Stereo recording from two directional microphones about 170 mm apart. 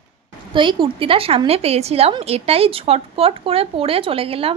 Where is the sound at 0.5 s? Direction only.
30° right (ahead or behind).